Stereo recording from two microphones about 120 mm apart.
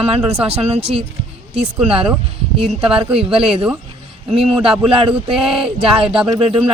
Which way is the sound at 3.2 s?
50° right (ahead or behind).